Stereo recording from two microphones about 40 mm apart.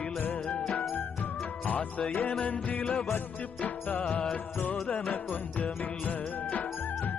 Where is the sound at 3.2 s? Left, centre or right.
Left.